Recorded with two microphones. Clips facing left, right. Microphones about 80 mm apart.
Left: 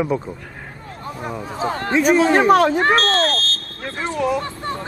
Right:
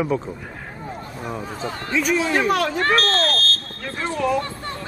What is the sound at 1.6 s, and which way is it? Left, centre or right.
Speech, left.